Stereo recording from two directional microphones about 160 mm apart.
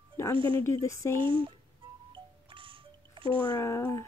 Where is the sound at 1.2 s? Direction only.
30° right (ahead or behind).